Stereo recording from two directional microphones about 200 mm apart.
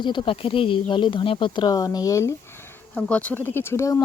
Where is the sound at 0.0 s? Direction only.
25° left (ahead or behind).